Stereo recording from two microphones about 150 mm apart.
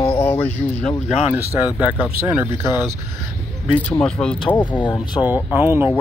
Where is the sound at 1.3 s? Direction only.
10° right (ahead or behind).